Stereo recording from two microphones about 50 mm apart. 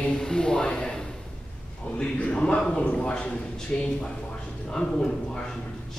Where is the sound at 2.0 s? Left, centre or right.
Centre.